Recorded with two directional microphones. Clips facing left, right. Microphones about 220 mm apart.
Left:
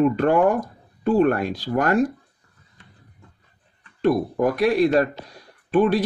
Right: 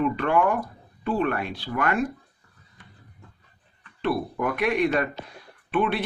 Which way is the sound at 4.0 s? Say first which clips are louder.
Left 6 dB; 40° left (ahead or behind).